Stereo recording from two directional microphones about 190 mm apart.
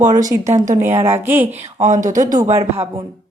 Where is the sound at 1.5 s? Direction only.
35° right (ahead or behind).